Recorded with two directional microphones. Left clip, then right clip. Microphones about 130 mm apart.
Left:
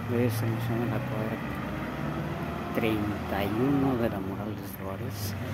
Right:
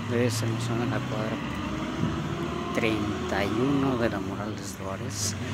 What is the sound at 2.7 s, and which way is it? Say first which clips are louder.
Speech: right 1 dB; 25° left (ahead or behind).